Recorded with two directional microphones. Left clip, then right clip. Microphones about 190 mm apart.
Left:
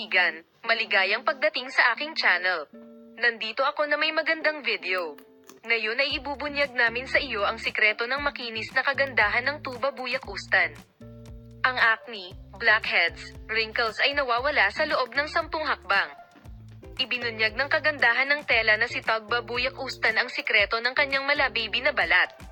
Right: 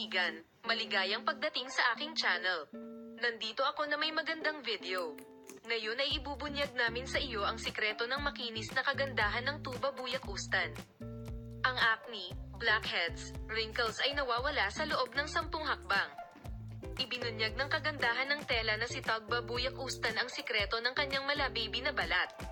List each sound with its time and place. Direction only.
0.1 s a woman's voice: 35° left (ahead or behind)
17.0 s speech: 10° right (ahead or behind)
17.2 s a woman's voice: 35° left (ahead or behind)